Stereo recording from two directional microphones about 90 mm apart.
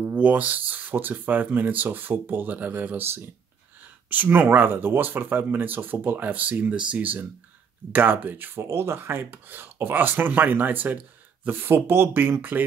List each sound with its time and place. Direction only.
0.0 s speech: 15° right (ahead or behind)